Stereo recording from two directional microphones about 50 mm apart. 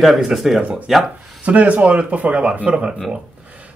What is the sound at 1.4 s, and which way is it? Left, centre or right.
Speech, right.